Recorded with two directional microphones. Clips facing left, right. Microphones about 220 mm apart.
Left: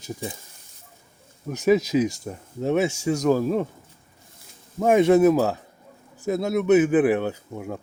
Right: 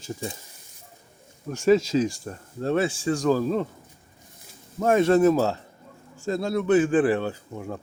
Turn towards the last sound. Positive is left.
turn(degrees=15)  # may be behind; listen again after turning